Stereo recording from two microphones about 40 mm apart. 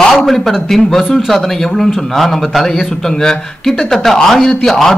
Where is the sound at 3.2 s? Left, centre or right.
Centre.